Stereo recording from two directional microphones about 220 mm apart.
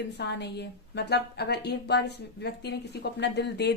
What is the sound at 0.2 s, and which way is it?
A woman's voice, 50° left (ahead or behind).